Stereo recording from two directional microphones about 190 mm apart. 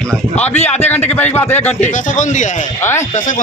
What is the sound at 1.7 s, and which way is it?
Speech, 40° left (ahead or behind).